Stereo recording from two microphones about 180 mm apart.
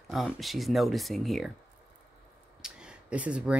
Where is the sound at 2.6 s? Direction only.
5° right (ahead or behind).